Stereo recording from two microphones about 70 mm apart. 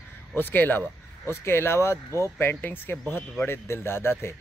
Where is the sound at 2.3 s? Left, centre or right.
Left.